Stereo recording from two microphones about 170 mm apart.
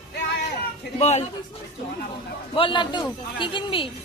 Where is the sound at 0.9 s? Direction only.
40° left (ahead or behind).